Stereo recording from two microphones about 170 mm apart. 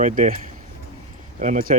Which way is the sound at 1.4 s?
45° right (ahead or behind).